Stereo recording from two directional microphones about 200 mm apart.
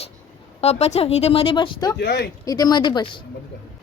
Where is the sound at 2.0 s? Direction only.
55° left (ahead or behind).